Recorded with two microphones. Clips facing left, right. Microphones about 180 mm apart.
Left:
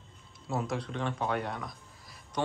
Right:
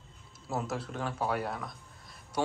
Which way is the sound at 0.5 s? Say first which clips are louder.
Left 1 dB; centre (ahead or behind).